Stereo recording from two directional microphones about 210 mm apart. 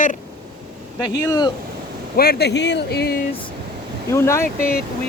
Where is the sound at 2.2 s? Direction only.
50° left (ahead or behind).